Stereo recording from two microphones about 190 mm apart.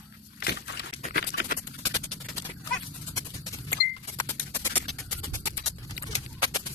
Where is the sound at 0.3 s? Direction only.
60° left (ahead or behind).